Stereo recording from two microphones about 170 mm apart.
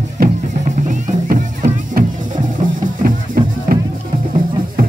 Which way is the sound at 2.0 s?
60° right (ahead or behind).